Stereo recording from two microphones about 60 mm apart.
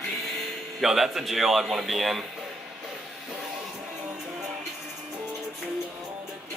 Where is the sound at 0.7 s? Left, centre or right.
Centre.